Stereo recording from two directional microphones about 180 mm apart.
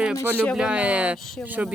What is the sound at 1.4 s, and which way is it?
Speech, 10° right (ahead or behind).